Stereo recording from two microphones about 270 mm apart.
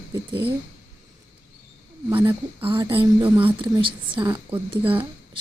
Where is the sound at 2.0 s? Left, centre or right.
Centre.